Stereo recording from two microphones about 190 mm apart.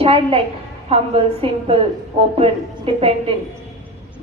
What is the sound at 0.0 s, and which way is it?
A woman's voice, 30° right (ahead or behind).